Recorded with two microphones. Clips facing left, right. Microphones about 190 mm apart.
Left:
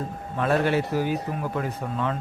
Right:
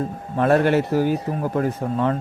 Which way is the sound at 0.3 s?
45° right (ahead or behind).